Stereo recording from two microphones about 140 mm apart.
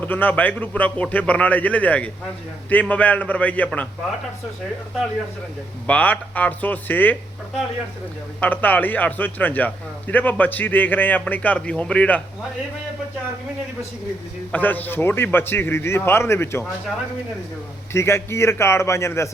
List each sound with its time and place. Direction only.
0.0 s a man's voice: 10° left (ahead or behind)
5.9 s a man's voice: 10° left (ahead or behind)
8.4 s a man's voice: 10° left (ahead or behind)
14.5 s a man's voice: 15° left (ahead or behind)
17.9 s a man's voice: 20° left (ahead or behind)